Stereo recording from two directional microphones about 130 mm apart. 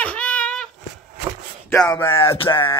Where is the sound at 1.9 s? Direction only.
20° left (ahead or behind).